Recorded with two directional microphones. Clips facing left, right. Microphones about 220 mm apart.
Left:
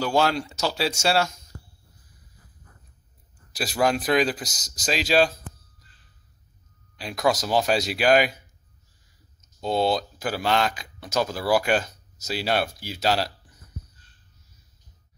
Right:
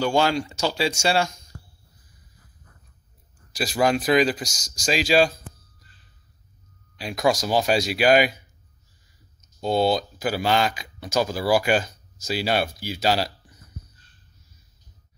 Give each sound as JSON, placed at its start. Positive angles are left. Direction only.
{"t": 0.0, "sound": "speech", "side_deg": 0}
{"t": 3.5, "sound": "speech", "side_deg": 0}
{"t": 7.0, "sound": "speech", "side_deg": 0}
{"t": 9.6, "sound": "speech", "side_deg": 0}